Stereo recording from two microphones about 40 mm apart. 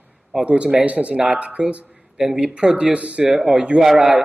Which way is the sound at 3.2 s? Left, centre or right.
Centre.